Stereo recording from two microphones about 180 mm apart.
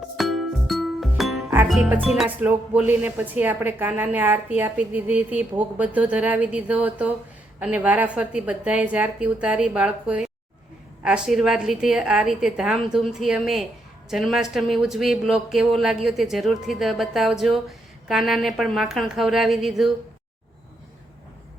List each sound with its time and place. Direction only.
0.2 s music: centre (ahead or behind)
1.6 s speech: centre (ahead or behind)